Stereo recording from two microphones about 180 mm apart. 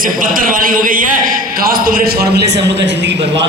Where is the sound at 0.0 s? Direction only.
50° right (ahead or behind).